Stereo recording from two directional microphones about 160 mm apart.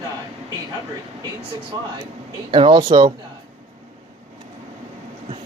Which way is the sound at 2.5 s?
30° right (ahead or behind).